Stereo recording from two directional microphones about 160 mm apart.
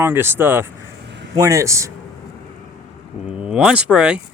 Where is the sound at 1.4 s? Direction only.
20° right (ahead or behind).